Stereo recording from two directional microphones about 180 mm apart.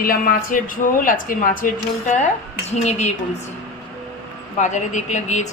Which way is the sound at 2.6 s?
35° left (ahead or behind).